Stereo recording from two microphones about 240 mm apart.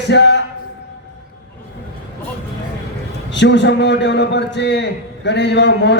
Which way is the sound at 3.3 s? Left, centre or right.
Left.